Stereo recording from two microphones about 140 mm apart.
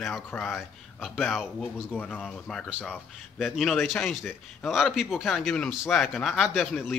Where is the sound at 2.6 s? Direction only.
10° right (ahead or behind).